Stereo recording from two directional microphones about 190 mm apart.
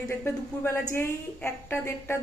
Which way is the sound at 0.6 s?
15° left (ahead or behind).